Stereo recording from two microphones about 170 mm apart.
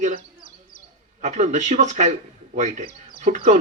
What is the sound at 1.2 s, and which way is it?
A man's voice, 45° right (ahead or behind).